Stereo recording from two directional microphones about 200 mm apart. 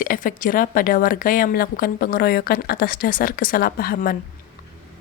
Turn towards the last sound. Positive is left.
turn(degrees=45)  # may be behind; listen again after turning